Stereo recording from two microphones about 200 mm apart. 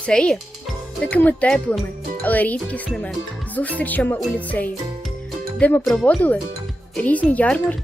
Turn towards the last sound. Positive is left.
turn(degrees=5)  # may be behind; listen again after turning